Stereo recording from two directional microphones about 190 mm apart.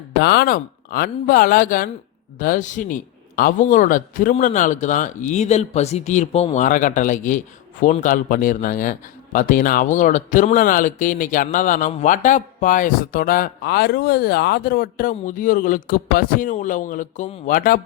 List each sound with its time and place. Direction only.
0.2 s speech: 60° left (ahead or behind)